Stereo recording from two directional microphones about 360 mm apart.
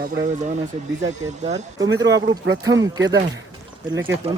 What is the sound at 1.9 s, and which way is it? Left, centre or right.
Speech, right.